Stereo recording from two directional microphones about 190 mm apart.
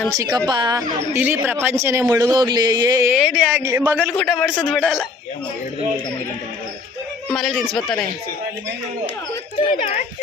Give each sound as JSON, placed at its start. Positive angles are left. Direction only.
{"t": 0.2, "sound": "a woman's voice", "side_deg": -20}
{"t": 3.1, "sound": "a man's voice", "side_deg": -5}
{"t": 4.2, "sound": "speech", "side_deg": 5}
{"t": 7.3, "sound": "speech", "side_deg": 0}
{"t": 9.8, "sound": "speech", "side_deg": 40}